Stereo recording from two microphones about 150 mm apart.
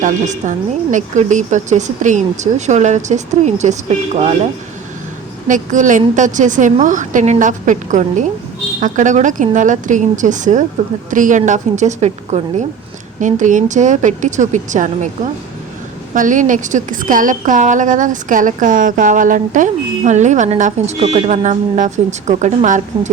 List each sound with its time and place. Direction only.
0.0 s speech: 55° right (ahead or behind)
5.5 s a woman's voice: 60° right (ahead or behind)
16.1 s a woman's voice: 60° right (ahead or behind)